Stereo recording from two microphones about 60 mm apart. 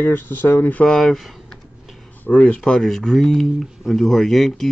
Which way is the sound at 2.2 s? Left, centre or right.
Left.